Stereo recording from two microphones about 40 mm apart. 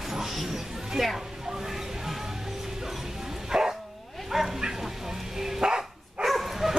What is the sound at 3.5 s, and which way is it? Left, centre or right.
Dog, centre.